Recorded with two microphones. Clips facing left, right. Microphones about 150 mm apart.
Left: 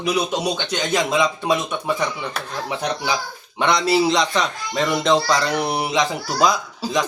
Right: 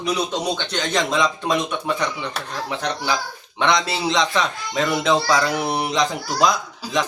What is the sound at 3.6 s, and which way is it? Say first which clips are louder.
Speech: left 3 dB; 5° left (ahead or behind).